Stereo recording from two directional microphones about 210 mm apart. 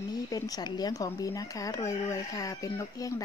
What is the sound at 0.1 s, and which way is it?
Speech, 20° left (ahead or behind).